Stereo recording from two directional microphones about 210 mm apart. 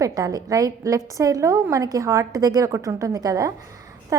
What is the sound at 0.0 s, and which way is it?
A woman's voice, 15° right (ahead or behind).